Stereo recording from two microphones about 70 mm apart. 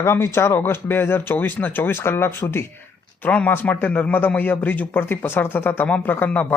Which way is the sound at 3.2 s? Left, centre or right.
Left.